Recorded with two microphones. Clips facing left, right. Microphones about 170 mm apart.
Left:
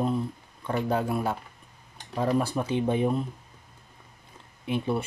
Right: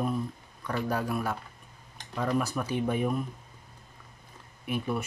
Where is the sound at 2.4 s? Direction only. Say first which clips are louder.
Left 3 dB; 30° left (ahead or behind).